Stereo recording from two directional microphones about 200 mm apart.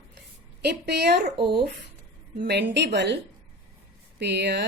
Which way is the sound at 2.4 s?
55° right (ahead or behind).